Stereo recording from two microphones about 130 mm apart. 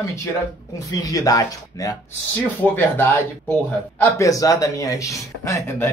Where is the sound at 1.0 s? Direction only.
25° left (ahead or behind).